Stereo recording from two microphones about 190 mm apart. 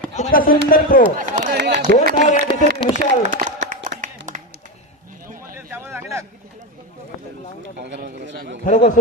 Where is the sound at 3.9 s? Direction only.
40° right (ahead or behind).